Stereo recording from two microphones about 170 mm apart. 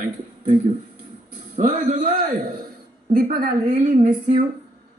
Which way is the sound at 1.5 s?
50° right (ahead or behind).